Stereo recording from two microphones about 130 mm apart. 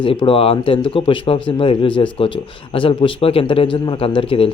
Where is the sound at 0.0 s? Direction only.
40° left (ahead or behind).